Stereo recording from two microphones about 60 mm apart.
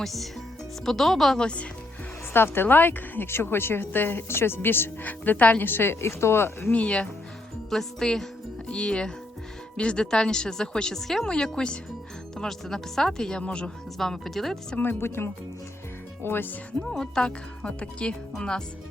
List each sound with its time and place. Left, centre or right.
0.0 s speech: centre
2.3 s a woman's voice: left
6.7 s speech: centre
7.7 s speech: centre
14.0 s speech: centre
14.9 s a woman's voice: left
16.9 s speech: centre